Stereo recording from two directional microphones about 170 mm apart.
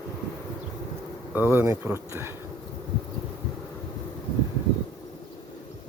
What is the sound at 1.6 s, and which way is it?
Speech, 15° right (ahead or behind).